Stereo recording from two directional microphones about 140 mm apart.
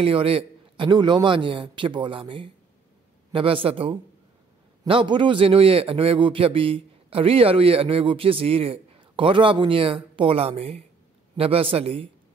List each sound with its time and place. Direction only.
0.0 s a man's voice: 45° right (ahead or behind)